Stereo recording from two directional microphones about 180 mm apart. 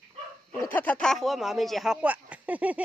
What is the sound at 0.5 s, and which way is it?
Bow-wow, 10° left (ahead or behind).